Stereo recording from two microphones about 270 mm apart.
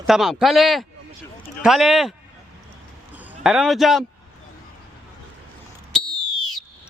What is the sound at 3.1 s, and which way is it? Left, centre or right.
Speech, centre.